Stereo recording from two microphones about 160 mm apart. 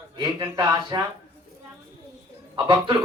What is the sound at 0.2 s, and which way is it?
Speech, 25° right (ahead or behind).